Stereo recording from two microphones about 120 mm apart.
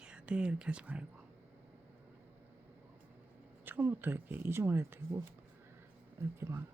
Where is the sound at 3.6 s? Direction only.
15° right (ahead or behind).